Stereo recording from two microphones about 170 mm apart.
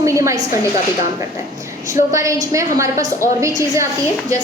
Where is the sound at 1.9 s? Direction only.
20° right (ahead or behind).